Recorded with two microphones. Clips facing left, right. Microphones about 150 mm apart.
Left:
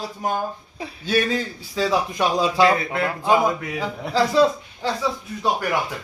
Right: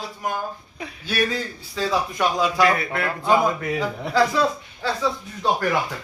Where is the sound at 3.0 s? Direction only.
15° left (ahead or behind).